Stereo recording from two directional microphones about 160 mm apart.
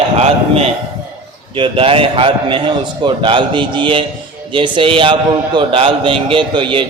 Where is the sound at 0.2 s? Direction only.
40° right (ahead or behind).